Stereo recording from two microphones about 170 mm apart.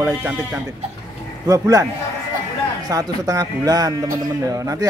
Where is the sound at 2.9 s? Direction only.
20° right (ahead or behind).